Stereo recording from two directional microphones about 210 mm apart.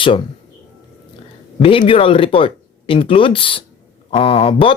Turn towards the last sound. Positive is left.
turn(degrees=25)  # may be behind; listen again after turning